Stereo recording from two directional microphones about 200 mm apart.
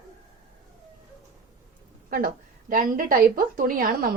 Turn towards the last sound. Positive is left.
turn(degrees=-45)  # may be behind; listen again after turning